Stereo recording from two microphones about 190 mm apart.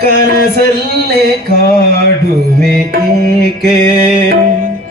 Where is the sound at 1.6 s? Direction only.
55° right (ahead or behind).